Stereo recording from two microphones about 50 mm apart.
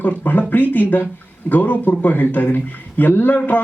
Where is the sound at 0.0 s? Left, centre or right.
Left.